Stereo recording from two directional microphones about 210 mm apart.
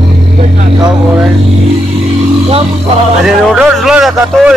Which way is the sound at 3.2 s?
5° right (ahead or behind).